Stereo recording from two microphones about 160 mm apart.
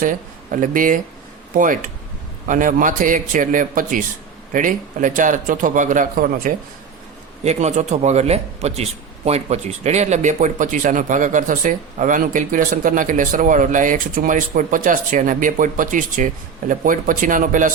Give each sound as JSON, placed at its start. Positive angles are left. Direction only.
{"t": 0.0, "sound": "a man's voice", "side_deg": -55}
{"t": 7.4, "sound": "a man's voice", "side_deg": -45}